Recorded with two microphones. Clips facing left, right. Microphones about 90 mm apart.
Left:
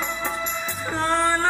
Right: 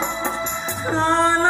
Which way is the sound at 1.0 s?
20° right (ahead or behind).